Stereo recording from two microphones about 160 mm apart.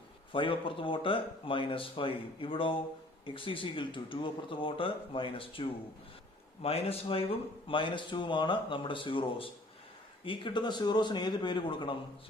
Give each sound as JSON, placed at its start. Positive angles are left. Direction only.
{"t": 0.3, "sound": "speech", "side_deg": 30}